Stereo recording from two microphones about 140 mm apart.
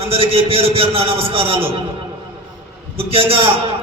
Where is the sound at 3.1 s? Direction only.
40° right (ahead or behind).